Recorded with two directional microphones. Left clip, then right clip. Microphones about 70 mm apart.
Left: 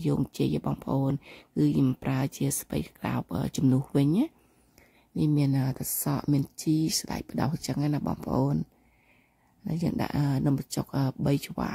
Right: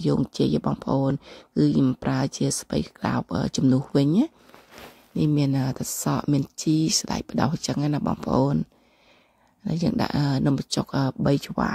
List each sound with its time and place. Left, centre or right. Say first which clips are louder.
0.0 s speech: right 5 dB; right
3.6 s speech: right 4 dB; centre
3.9 s speech: right 5 dB; right
5.1 s speech: right 4 dB; centre
9.7 s speech: right 5 dB; right